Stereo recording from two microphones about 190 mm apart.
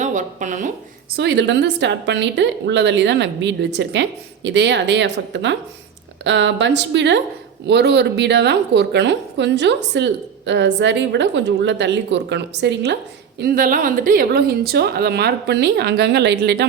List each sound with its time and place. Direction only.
0.0 s speech: 40° right (ahead or behind)
1.1 s a woman's voice: 65° right (ahead or behind)
13.4 s a woman's voice: 50° right (ahead or behind)